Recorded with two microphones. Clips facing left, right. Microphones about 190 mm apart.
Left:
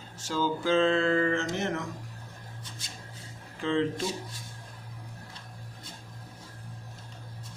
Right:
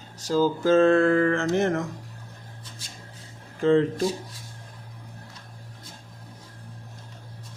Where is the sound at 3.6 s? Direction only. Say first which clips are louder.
Right 8 dB; 45° right (ahead or behind).